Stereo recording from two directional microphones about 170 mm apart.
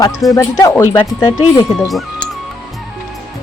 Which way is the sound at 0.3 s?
20° left (ahead or behind).